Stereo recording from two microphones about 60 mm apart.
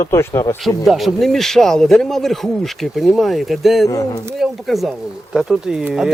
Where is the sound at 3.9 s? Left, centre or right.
Left.